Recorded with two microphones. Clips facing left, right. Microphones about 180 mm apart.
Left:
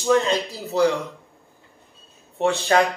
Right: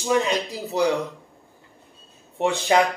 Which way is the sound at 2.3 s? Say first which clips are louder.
Left 1 dB; 15° right (ahead or behind).